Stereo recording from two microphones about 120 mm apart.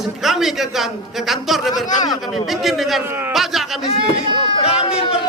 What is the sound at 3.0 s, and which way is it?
Speech, 20° right (ahead or behind).